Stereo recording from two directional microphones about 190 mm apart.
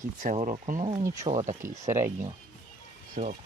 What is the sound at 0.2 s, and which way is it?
Speech, 40° right (ahead or behind).